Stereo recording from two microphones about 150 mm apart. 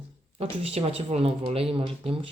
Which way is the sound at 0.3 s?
40° right (ahead or behind).